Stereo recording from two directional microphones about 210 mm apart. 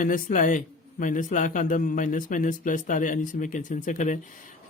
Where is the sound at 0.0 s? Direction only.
40° left (ahead or behind).